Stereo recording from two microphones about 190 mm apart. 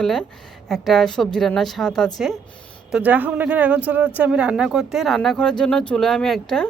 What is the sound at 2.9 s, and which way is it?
Speech, 10° right (ahead or behind).